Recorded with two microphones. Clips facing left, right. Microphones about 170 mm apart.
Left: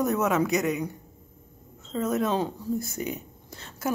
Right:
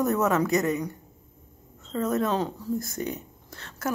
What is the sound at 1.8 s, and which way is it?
Speech, 5° left (ahead or behind).